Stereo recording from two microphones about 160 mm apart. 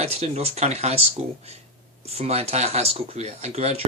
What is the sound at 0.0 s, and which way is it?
Speech, 40° right (ahead or behind).